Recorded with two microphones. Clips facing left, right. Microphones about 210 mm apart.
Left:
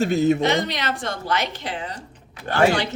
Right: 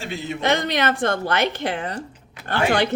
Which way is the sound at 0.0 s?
45° left (ahead or behind).